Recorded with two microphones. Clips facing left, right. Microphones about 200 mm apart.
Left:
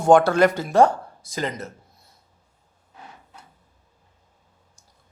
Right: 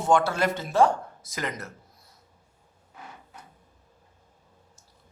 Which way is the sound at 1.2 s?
30° left (ahead or behind).